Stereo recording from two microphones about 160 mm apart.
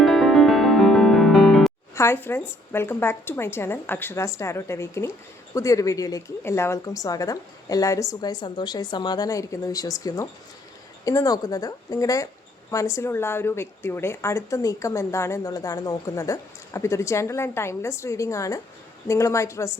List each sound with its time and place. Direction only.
0.0 s music: centre (ahead or behind)
2.0 s a woman's voice: 15° left (ahead or behind)